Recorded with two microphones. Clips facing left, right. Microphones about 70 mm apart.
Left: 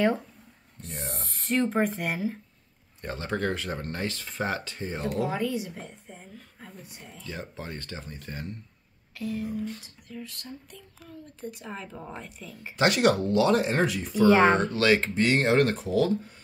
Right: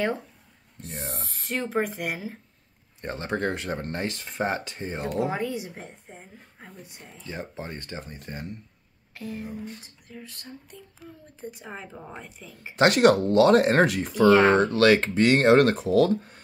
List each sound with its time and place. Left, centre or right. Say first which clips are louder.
0.8 s speech: right 1 dB; centre
3.0 s a woman's voice: right 2 dB; right
9.1 s a sound: left 3 dB; right
10.1 s a woman's voice: left 2 dB; right
12.7 s speech: right 4 dB; right
14.3 s speech: right 2 dB; centre
14.8 s speech: right 4 dB; right